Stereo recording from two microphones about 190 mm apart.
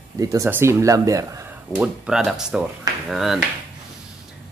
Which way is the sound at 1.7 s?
5° right (ahead or behind).